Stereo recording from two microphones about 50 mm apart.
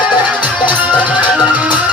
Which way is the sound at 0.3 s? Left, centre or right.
Right.